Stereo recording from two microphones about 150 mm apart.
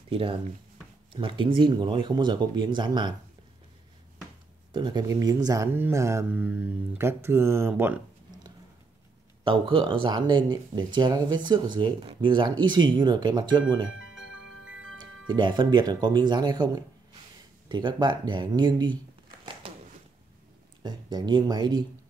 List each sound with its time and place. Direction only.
0.1 s speech: 40° right (ahead or behind)
4.7 s speech: 30° right (ahead or behind); by 8.0 s 15° right (ahead or behind)
9.4 s speech: 35° right (ahead or behind)
15.2 s speech: 30° right (ahead or behind)
19.6 s a sound: 40° right (ahead or behind)
20.8 s speech: 30° right (ahead or behind)